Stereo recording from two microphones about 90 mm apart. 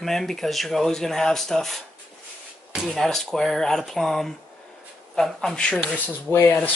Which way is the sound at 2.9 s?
5° left (ahead or behind).